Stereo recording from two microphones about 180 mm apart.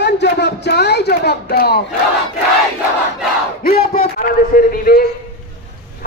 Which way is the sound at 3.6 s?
55° left (ahead or behind).